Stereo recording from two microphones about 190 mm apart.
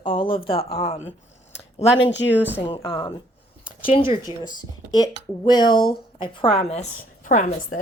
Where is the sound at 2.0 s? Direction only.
70° left (ahead or behind).